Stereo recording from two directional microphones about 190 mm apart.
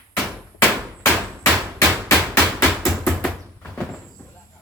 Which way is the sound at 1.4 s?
10° left (ahead or behind).